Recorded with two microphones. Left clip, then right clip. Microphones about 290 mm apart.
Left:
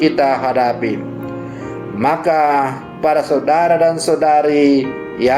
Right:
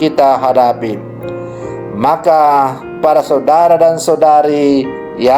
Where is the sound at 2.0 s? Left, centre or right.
Right.